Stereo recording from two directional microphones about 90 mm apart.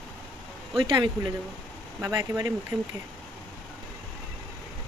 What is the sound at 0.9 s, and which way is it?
Speech, 55° right (ahead or behind).